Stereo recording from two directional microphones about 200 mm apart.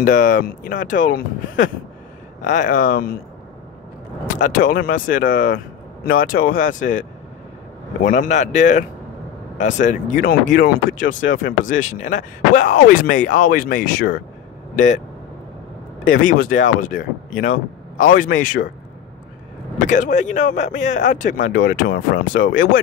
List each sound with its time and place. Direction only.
0.0 s speech: 40° left (ahead or behind)
4.4 s speech: 45° left (ahead or behind)
8.0 s speech: 40° left (ahead or behind)
10.9 s speech: 70° left (ahead or behind)
11.4 s speech: 40° left (ahead or behind)
16.2 s speech: 45° left (ahead or behind)
19.9 s speech: 35° left (ahead or behind)
21.4 s speech: 50° left (ahead or behind)